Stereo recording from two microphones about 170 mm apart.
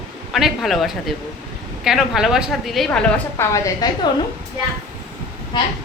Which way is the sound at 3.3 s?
20° left (ahead or behind).